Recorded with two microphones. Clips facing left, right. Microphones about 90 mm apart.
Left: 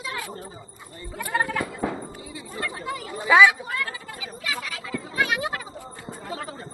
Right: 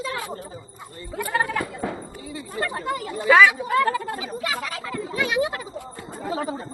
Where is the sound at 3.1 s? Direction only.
5° left (ahead or behind).